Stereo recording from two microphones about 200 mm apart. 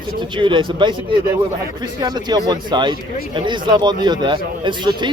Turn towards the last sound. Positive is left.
turn(degrees=-20)  # may be behind; listen again after turning